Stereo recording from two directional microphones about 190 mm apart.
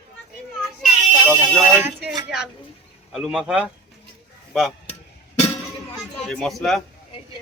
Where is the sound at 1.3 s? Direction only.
10° right (ahead or behind).